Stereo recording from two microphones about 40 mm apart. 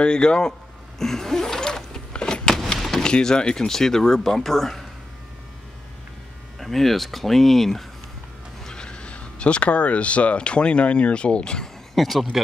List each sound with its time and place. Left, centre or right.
0.0 s speech: left
0.5 s a sound: centre
3.0 s speech: centre
6.6 s speech: centre
8.6 s speech: left
11.9 s speech: centre